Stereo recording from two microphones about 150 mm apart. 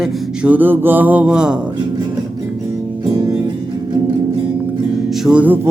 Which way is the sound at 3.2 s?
20° right (ahead or behind).